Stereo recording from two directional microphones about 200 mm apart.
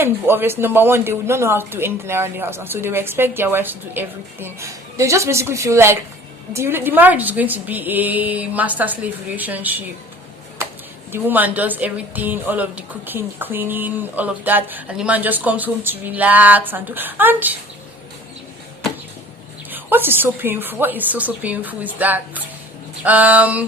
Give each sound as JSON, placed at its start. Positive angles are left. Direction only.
{"t": 0.0, "sound": "speech", "side_deg": -10}
{"t": 11.1, "sound": "speech", "side_deg": -10}
{"t": 19.7, "sound": "speech", "side_deg": -10}